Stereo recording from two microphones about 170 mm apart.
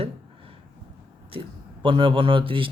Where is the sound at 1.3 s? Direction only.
30° right (ahead or behind).